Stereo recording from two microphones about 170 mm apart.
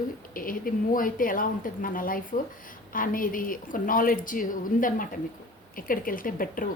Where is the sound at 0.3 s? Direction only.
55° left (ahead or behind).